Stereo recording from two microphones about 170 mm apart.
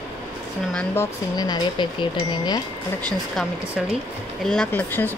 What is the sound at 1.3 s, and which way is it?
Speech, 25° left (ahead or behind).